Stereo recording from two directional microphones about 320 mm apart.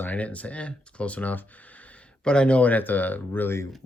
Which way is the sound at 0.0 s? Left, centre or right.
Centre.